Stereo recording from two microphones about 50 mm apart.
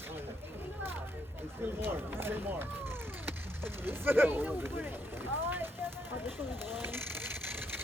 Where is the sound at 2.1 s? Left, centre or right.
Right.